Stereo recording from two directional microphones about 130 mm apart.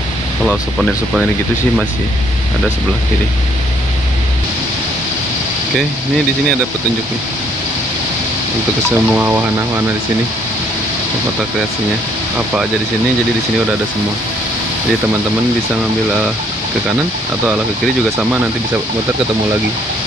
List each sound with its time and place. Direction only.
0.5 s speech: 5° right (ahead or behind)
8.8 s speech: 15° right (ahead or behind)
18.1 s speech: 15° right (ahead or behind)